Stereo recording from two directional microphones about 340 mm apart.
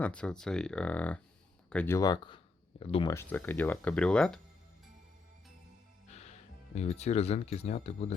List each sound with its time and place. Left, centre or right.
0.0 s speech: centre
6.1 s speech: centre